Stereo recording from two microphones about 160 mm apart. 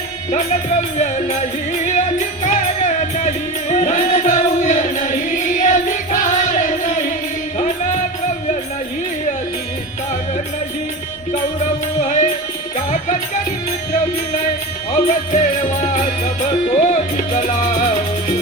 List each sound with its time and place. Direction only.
0.9 s music: 50° left (ahead or behind)
12.0 s music: 55° left (ahead or behind)
15.0 s music: 55° left (ahead or behind)